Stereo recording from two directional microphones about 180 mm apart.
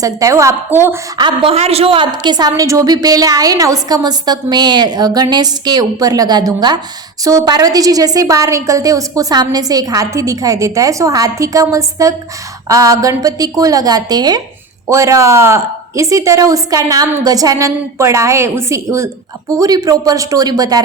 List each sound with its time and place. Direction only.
0.0 s a woman's voice: 20° right (ahead or behind)
1.2 s a woman's voice: 30° right (ahead or behind)